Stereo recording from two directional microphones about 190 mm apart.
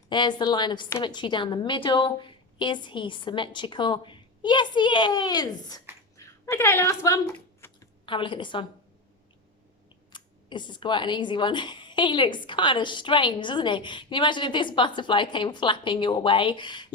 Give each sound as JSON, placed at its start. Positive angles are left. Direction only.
{"t": 0.1, "sound": "speech", "side_deg": 25}
{"t": 6.1, "sound": "a sound", "side_deg": 15}
{"t": 8.0, "sound": "speech", "side_deg": 25}
{"t": 10.1, "sound": "speech", "side_deg": 25}